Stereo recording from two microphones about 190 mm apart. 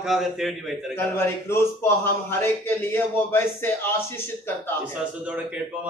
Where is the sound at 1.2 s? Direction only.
15° left (ahead or behind).